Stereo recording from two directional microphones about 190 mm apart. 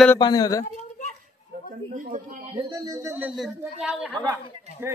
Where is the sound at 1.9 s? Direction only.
45° right (ahead or behind).